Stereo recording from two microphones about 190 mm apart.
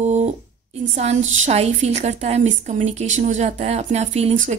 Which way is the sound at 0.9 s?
35° right (ahead or behind).